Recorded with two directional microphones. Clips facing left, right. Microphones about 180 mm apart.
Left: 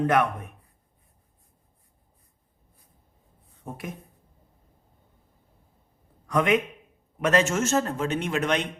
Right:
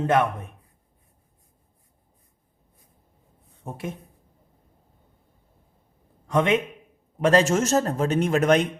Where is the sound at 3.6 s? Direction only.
25° right (ahead or behind).